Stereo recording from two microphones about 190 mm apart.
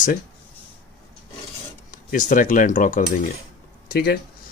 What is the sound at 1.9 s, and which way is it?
Speech, 45° left (ahead or behind).